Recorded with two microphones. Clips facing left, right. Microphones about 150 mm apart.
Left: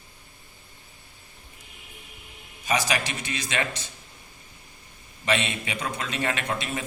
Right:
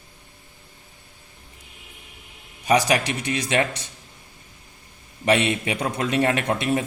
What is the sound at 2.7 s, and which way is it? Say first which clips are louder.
Speech: right 7 dB; 60° right (ahead or behind).